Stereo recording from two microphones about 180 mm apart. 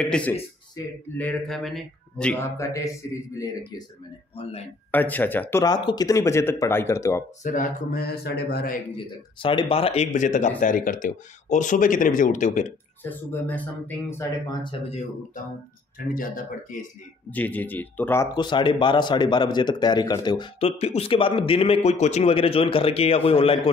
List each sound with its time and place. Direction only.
0.0 s speech: 5° left (ahead or behind)
2.3 s speech: 15° left (ahead or behind)
4.4 s speech: 35° left (ahead or behind)
4.9 s speech: 10° left (ahead or behind)
7.4 s speech: 45° left (ahead or behind)
8.1 s a man's voice: 65° left (ahead or behind)
8.9 s speech: 30° left (ahead or behind); by 12.7 s 45° left (ahead or behind)
13.0 s speech: 10° left (ahead or behind)
14.6 s speech: 30° left (ahead or behind)
16.1 s speech: 50° left (ahead or behind)
17.3 s speech: 10° left (ahead or behind); by 23.6 s 30° left (ahead or behind)